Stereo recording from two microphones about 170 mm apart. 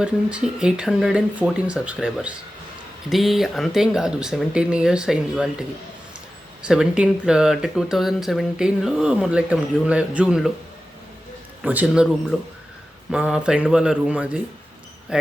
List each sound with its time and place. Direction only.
0.0 s speech: 5° right (ahead or behind)
11.6 s a man's voice: 10° right (ahead or behind)
13.1 s speech: 5° right (ahead or behind)